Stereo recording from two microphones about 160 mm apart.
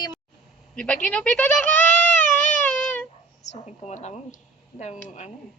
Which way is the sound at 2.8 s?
10° left (ahead or behind).